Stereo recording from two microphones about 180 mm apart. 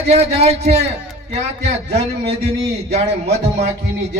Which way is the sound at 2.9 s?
40° right (ahead or behind).